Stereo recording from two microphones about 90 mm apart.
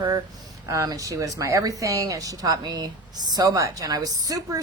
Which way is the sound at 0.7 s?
40° right (ahead or behind).